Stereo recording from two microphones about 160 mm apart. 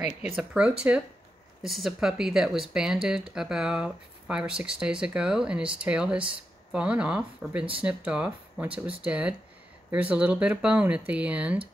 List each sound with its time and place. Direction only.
0.0 s speech: 5° right (ahead or behind)
8.6 s speech: 35° right (ahead or behind)
9.0 s speech: 10° right (ahead or behind)